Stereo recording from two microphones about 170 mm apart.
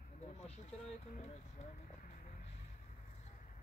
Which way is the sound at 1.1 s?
45° left (ahead or behind).